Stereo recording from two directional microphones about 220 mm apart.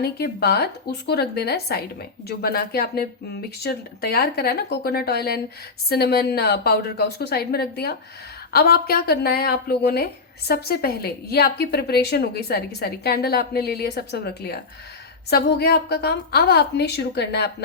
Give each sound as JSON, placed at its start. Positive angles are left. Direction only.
{"t": 0.0, "sound": "a woman's voice", "side_deg": 45}